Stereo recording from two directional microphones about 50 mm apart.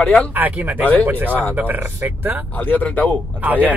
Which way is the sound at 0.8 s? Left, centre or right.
Left.